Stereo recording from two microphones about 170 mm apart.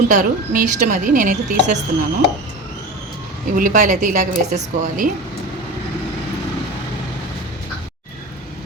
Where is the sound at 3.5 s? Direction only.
50° right (ahead or behind).